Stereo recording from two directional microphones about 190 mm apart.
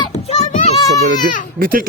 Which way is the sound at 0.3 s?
35° left (ahead or behind).